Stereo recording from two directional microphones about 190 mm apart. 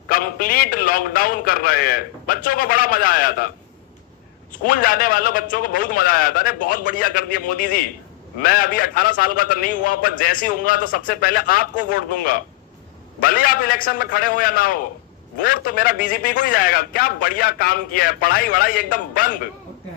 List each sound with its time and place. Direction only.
0.1 s a man's voice: 50° left (ahead or behind)
4.6 s a man's voice: 50° left (ahead or behind)